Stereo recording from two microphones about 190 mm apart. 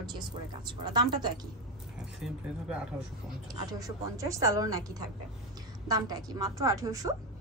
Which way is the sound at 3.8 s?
15° right (ahead or behind).